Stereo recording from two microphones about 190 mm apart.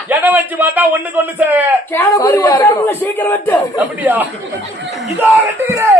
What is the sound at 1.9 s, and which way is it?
A man's voice, 15° left (ahead or behind).